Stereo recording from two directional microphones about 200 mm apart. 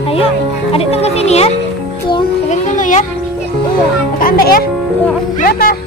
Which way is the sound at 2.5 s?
40° left (ahead or behind).